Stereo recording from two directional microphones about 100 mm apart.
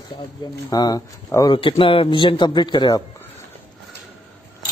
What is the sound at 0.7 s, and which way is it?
Speech, 40° left (ahead or behind).